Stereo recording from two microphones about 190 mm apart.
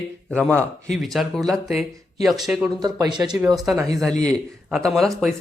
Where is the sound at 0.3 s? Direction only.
5° left (ahead or behind).